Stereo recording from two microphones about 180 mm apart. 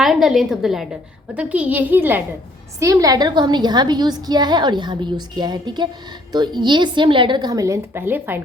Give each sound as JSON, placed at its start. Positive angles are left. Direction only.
{"t": 0.0, "sound": "a woman's voice", "side_deg": 0}